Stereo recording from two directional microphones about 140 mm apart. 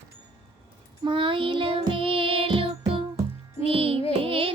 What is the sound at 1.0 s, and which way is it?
Music, 35° right (ahead or behind).